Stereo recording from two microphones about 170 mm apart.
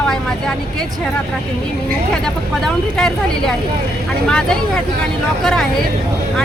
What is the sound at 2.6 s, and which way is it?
Speech, 5° left (ahead or behind).